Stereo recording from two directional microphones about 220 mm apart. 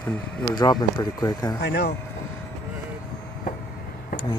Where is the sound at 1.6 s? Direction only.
45° left (ahead or behind).